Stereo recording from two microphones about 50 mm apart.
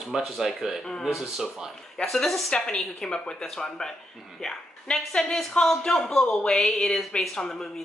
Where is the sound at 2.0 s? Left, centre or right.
Centre.